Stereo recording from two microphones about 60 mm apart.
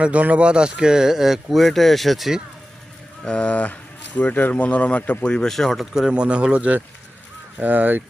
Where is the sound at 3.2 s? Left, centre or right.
Centre.